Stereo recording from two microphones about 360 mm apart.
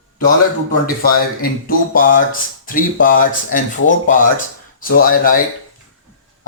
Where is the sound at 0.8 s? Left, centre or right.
Left.